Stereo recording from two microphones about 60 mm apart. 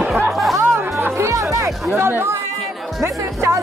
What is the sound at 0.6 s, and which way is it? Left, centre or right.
Music, right.